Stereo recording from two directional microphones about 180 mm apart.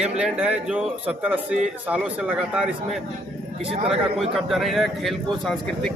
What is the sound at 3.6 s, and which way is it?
Speech, 35° right (ahead or behind).